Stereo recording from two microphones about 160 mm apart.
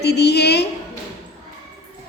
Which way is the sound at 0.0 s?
90° left.